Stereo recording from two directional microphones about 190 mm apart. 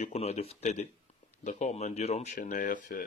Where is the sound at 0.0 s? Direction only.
35° left (ahead or behind).